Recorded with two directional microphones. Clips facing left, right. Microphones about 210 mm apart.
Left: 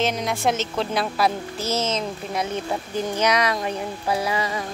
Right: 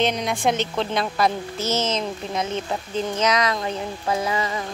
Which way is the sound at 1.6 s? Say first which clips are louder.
Right 1 dB; 30° left (ahead or behind).